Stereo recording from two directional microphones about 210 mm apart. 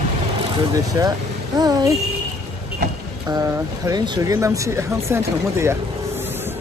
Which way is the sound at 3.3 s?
15° right (ahead or behind).